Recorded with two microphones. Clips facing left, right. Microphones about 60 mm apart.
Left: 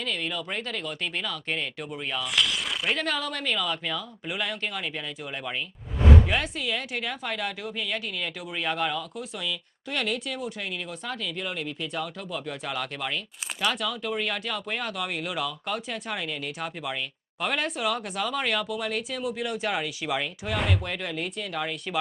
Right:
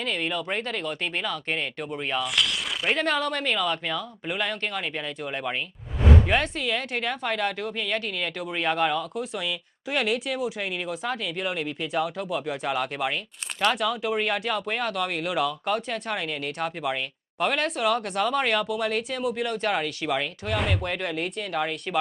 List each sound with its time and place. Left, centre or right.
0.0 s speech: centre
5.3 s speech: right
6.0 s speech: centre